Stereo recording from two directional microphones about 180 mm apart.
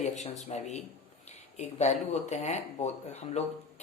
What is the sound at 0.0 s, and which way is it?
Speech, 40° left (ahead or behind).